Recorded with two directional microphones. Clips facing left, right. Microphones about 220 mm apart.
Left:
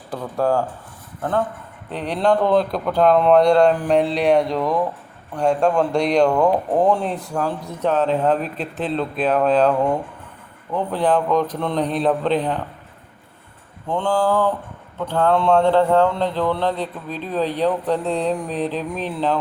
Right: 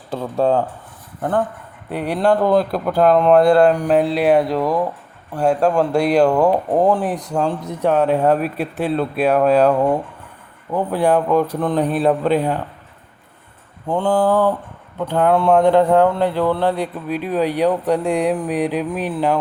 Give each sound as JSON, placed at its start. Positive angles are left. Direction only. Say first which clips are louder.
{"t": 0.1, "sound": "speech", "louder": "right 3 dB", "side_deg": -25}
{"t": 7.0, "sound": "speech", "louder": "right 3 dB", "side_deg": -15}
{"t": 13.8, "sound": "speech", "louder": "right 3 dB", "side_deg": -10}
{"t": 14.1, "sound": "speech", "louder": "right 3 dB", "side_deg": -20}